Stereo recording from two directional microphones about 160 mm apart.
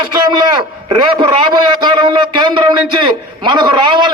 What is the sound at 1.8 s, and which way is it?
A man's voice, 30° right (ahead or behind).